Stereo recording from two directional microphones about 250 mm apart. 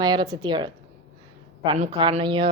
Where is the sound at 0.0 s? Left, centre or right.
Centre.